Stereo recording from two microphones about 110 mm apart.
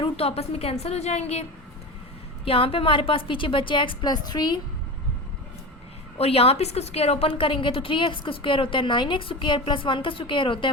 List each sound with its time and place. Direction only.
0.0 s a woman's voice: 65° left (ahead or behind)
2.4 s a woman's voice: 55° left (ahead or behind); by 4.6 s 40° left (ahead or behind)
6.1 s a woman's voice: 65° left (ahead or behind)